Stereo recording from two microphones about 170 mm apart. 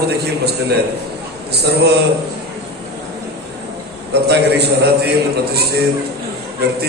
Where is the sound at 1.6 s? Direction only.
75° right (ahead or behind).